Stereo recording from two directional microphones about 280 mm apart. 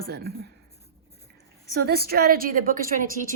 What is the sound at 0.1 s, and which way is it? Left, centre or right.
Speech, right.